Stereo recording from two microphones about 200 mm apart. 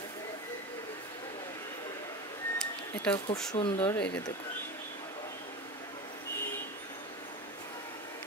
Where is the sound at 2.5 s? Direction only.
5° left (ahead or behind).